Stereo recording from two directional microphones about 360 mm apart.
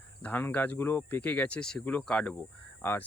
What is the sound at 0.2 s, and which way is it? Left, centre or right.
Speech, centre.